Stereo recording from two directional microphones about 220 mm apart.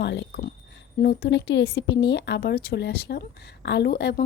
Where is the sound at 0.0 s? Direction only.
50° left (ahead or behind).